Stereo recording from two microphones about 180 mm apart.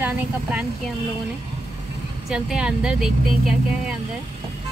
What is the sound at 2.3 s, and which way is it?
Speech, 5° right (ahead or behind).